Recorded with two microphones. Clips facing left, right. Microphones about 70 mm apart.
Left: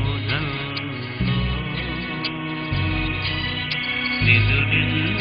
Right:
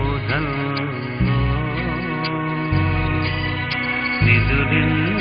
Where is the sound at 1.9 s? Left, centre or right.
Right.